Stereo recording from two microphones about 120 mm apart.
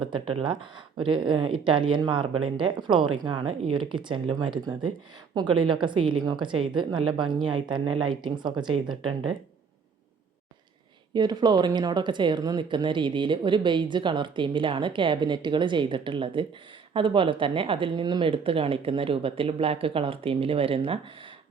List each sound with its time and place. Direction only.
0.9 s a woman's voice: 45° right (ahead or behind)
11.1 s a woman's voice: 35° right (ahead or behind)